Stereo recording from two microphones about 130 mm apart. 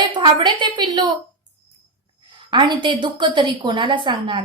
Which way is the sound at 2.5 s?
35° right (ahead or behind).